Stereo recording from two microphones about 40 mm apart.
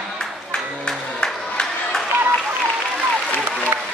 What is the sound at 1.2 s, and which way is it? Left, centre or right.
Crowd, centre.